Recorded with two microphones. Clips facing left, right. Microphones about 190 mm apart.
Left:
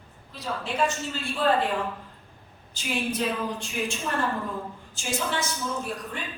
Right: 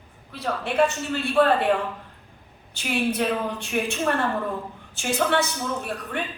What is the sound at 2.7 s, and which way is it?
A woman's voice, 60° right (ahead or behind).